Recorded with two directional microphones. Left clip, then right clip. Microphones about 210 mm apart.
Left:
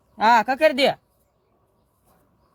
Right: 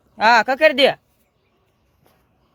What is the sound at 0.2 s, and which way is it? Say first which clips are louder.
Speech: right 3 dB; 25° right (ahead or behind).